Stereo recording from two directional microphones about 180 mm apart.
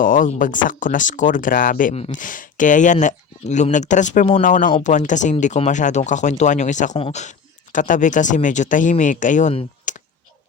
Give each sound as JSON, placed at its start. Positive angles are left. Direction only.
{"t": 0.0, "sound": "speech", "side_deg": 45}